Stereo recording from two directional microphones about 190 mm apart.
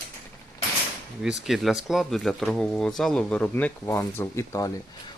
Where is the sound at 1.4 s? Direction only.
Centre (ahead or behind).